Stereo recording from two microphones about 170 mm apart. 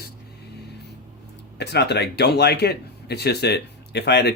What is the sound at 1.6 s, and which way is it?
Speech, 80° left.